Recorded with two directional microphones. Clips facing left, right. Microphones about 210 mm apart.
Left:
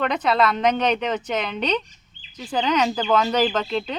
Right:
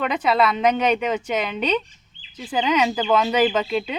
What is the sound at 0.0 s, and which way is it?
A woman's voice, 5° right (ahead or behind).